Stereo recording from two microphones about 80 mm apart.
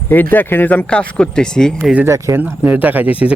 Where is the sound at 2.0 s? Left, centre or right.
Right.